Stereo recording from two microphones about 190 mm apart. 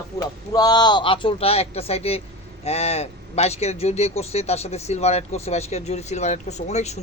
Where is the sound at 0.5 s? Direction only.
20° left (ahead or behind).